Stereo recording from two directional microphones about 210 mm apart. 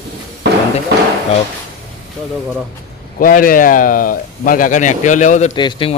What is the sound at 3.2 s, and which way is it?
Speech, 40° left (ahead or behind).